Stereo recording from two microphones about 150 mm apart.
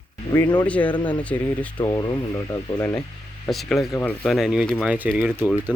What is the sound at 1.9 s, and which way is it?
Speech, 30° left (ahead or behind).